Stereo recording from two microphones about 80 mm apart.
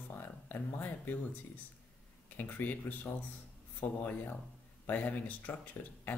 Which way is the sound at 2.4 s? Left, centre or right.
Left.